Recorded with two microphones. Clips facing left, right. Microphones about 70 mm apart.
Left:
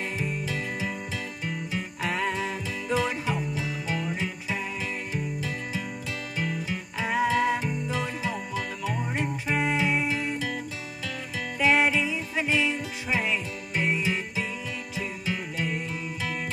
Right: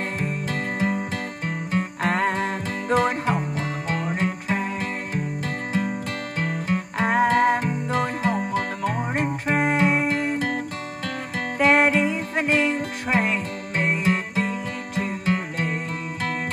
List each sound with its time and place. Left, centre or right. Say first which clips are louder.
0.2 s music: right 4 dB; right